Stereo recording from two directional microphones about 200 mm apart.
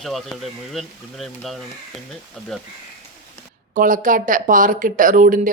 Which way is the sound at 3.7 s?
40° right (ahead or behind).